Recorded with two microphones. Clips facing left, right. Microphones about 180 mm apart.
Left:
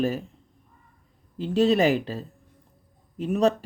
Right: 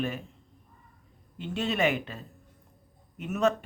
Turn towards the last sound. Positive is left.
turn(degrees=35)  # may be behind; listen again after turning